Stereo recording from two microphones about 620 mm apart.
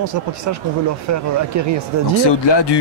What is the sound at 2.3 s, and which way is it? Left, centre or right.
Speech, left.